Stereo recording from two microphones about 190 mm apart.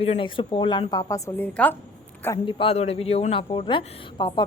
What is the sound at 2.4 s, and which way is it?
A woman's voice, 30° left (ahead or behind).